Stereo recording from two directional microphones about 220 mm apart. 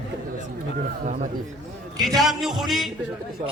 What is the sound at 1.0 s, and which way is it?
Speech, 30° right (ahead or behind).